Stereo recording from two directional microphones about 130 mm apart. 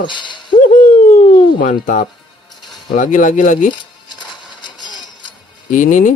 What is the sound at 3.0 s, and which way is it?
Speech, 75° left (ahead or behind).